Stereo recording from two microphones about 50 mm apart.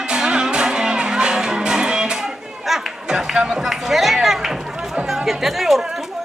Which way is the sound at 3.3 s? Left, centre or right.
Centre.